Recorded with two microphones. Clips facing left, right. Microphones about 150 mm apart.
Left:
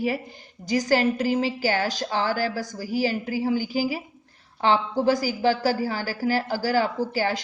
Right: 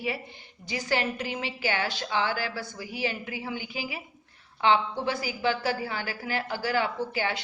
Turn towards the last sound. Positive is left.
turn(degrees=40)  # may be behind; listen again after turning